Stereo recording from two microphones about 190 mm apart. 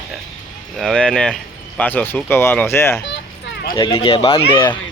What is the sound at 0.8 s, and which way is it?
Speech, centre (ahead or behind).